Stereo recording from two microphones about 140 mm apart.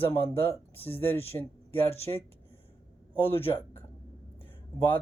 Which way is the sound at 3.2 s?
15° left (ahead or behind).